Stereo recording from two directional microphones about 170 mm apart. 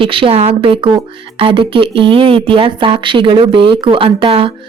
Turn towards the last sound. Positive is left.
turn(degrees=-30)  # may be behind; listen again after turning